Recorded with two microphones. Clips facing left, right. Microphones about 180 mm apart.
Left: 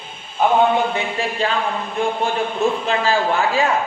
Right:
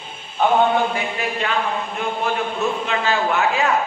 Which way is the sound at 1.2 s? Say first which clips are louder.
Left 4 dB; 30° left (ahead or behind).